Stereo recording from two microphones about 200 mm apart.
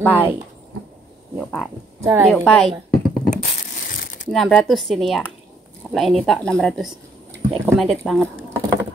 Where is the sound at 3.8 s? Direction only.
50° left (ahead or behind).